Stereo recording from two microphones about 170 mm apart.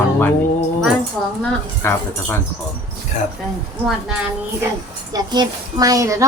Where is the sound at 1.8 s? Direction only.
15° left (ahead or behind).